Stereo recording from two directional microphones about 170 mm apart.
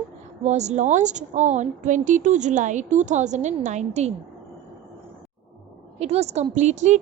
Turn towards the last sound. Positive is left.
turn(degrees=-45)  # may be behind; listen again after turning